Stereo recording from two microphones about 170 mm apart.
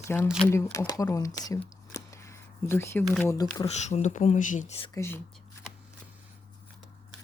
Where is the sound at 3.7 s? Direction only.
40° left (ahead or behind).